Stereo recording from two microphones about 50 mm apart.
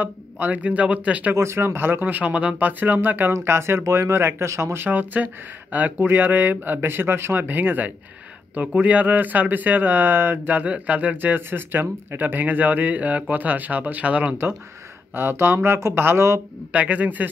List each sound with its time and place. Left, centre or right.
0.0 s speech: right
1.3 s speech: right
3.3 s speech: right
4.7 s speech: right
7.4 s speech: right
10.5 s speech: right
11.1 s speech: right
12.2 s speech: right
15.1 s speech: right
16.7 s speech: right